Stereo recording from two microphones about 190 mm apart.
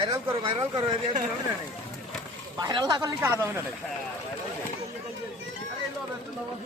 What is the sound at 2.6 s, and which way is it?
Speech, 20° right (ahead or behind).